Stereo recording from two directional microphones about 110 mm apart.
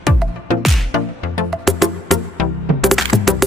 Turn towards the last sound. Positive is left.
turn(degrees=0)  # may be behind; listen again after turning